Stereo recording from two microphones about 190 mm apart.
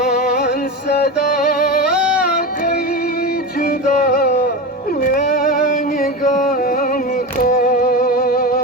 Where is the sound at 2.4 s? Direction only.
55° left (ahead or behind).